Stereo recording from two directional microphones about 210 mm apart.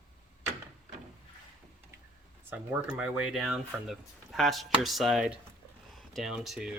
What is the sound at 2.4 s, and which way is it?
Speech, 10° right (ahead or behind).